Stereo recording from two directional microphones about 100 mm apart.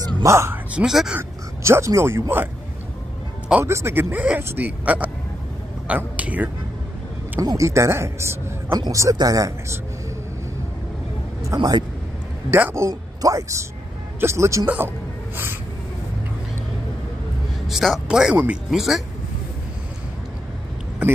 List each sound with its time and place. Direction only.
0.0 s speech: 30° right (ahead or behind)
0.7 s speech: 5° right (ahead or behind)
1.6 s speech: 30° right (ahead or behind)
3.6 s speech: 25° right (ahead or behind)
7.3 s speech: 35° right (ahead or behind)
11.4 s speech: 40° right (ahead or behind)
12.4 s speech: 20° right (ahead or behind)
17.6 s a man's voice: centre (ahead or behind)